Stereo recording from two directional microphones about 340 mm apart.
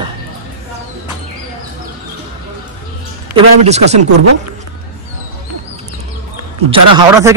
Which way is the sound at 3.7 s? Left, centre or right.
Centre.